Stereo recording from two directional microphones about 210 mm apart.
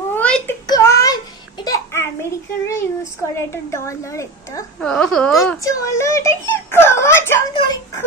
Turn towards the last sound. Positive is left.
turn(degrees=20)  # may be behind; listen again after turning